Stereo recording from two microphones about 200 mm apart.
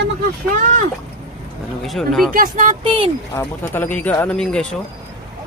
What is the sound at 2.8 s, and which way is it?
Speech, 25° right (ahead or behind).